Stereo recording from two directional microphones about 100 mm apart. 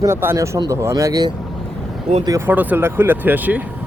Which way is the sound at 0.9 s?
40° right (ahead or behind).